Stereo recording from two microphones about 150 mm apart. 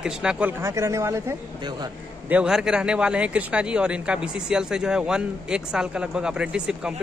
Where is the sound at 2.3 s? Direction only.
5° right (ahead or behind).